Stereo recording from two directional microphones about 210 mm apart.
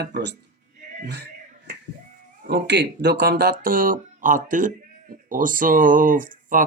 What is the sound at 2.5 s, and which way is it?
Speech, 55° right (ahead or behind).